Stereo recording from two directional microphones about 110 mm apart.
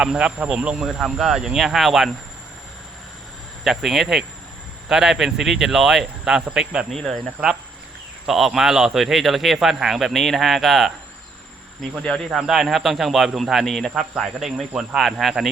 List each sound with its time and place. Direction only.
0.0 s a man's voice: 5° right (ahead or behind)
3.6 s a man's voice: centre (ahead or behind)
6.9 s a man's voice: 5° left (ahead or behind)
8.3 s a man's voice: 5° right (ahead or behind)